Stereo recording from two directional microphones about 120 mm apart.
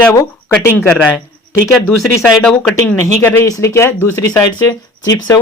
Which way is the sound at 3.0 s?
20° left (ahead or behind).